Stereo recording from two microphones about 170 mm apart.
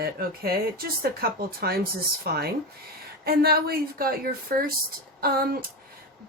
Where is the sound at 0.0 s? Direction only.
60° right (ahead or behind).